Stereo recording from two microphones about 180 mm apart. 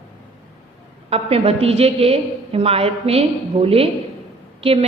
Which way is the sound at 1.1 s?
35° right (ahead or behind).